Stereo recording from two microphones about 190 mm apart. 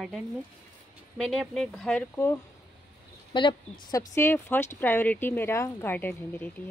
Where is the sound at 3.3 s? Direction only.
25° left (ahead or behind).